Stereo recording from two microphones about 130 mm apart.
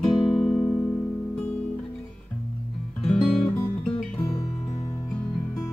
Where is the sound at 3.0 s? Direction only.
45° left (ahead or behind).